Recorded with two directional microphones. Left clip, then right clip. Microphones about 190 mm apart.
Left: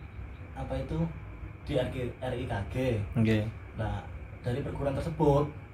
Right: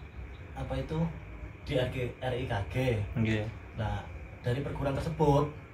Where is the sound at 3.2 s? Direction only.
25° left (ahead or behind).